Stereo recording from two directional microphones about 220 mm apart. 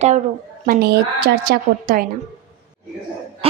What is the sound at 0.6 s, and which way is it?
A woman's voice, 40° right (ahead or behind).